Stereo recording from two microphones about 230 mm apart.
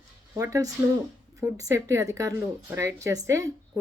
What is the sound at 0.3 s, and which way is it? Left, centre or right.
Speech, centre.